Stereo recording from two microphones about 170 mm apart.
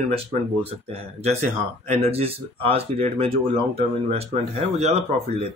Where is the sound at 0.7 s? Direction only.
35° right (ahead or behind).